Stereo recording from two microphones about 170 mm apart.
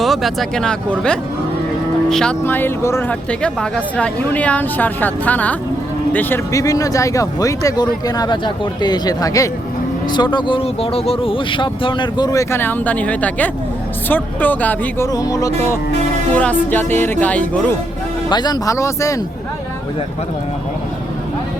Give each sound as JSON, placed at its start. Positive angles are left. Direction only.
{"t": 0.0, "sound": "speech", "side_deg": 0}
{"t": 16.3, "sound": "speech", "side_deg": 10}
{"t": 18.3, "sound": "speech", "side_deg": 25}